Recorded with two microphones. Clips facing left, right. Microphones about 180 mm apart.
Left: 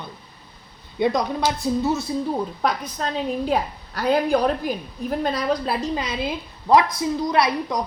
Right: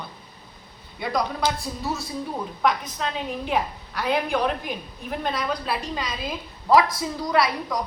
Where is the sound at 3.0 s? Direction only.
40° left (ahead or behind).